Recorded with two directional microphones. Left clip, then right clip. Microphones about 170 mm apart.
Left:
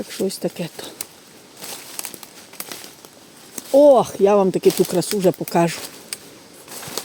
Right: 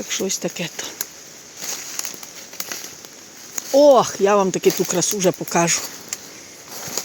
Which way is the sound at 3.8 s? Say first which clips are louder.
Even; 45° left (ahead or behind).